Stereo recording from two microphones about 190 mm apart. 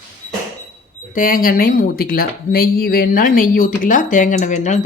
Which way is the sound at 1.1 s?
50° left (ahead or behind).